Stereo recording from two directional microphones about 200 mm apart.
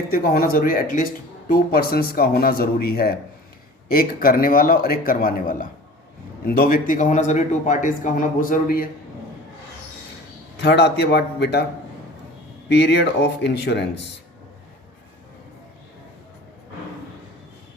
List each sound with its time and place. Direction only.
0.1 s a man's voice: 45° left (ahead or behind)
10.6 s speech: 55° left (ahead or behind)
12.6 s speech: 55° left (ahead or behind)